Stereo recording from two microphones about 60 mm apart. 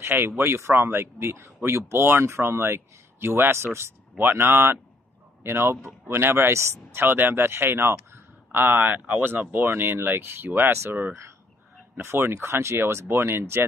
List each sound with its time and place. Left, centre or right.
0.0 s speech: right